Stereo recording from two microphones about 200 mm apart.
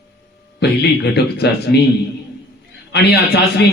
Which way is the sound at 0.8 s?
55° left (ahead or behind).